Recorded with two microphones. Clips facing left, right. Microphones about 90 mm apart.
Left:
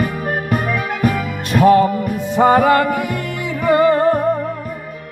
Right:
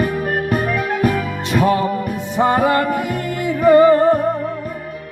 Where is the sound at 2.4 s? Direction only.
65° left (ahead or behind).